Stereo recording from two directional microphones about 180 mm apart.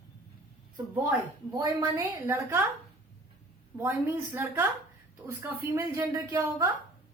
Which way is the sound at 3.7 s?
15° right (ahead or behind).